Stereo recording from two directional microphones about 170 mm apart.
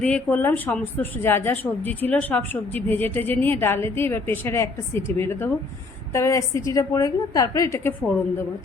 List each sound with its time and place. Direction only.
0.0 s a woman's voice: 10° left (ahead or behind)